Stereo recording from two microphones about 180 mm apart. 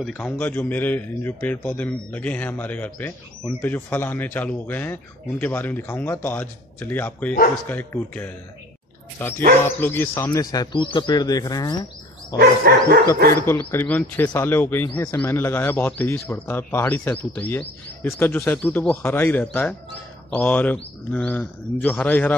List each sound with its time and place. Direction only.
0.0 s a man's voice: 5° left (ahead or behind); by 12.4 s 25° left (ahead or behind)
12.4 s dog: 60° right (ahead or behind)
13.5 s a man's voice: 10° left (ahead or behind)